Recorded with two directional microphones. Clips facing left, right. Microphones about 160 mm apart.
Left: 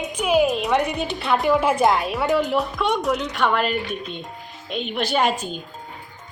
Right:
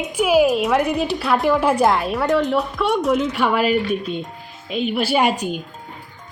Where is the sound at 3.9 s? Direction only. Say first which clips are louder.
Right 7 dB; 45° right (ahead or behind).